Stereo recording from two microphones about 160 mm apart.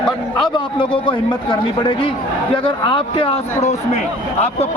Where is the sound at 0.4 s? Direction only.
30° left (ahead or behind).